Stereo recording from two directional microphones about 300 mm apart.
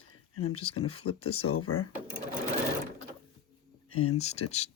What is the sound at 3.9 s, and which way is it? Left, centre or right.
Speech, left.